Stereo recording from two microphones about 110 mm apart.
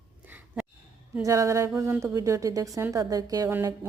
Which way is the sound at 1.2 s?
30° right (ahead or behind).